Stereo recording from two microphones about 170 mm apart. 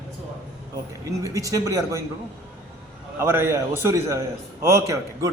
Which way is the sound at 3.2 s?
15° right (ahead or behind).